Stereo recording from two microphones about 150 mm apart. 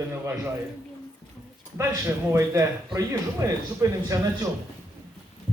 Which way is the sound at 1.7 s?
20° right (ahead or behind).